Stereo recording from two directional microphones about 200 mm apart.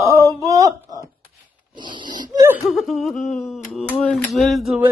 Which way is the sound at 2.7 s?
Centre (ahead or behind).